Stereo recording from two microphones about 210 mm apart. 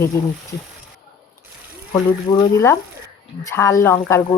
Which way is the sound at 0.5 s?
50° left (ahead or behind).